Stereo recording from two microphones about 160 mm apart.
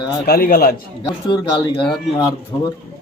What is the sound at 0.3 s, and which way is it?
Speech, 70° left (ahead or behind).